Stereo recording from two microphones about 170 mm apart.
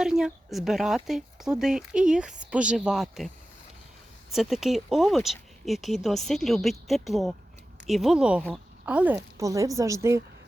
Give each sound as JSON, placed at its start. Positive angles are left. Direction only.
{"t": 0.0, "sound": "speech", "side_deg": -5}
{"t": 4.3, "sound": "a woman's voice", "side_deg": 0}